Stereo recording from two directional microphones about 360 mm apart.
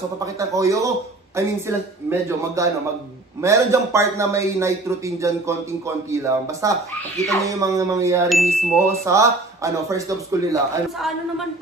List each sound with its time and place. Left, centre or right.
0.2 s chime: centre